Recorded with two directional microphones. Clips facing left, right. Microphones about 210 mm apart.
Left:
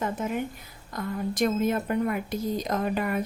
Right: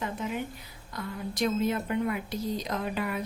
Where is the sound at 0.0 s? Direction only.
45° left (ahead or behind).